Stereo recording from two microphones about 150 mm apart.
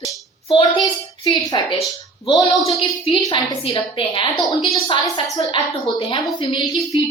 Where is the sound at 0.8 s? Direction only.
30° left (ahead or behind).